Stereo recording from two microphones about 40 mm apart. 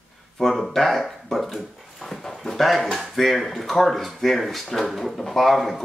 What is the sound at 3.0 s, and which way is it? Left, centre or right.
Speech, centre.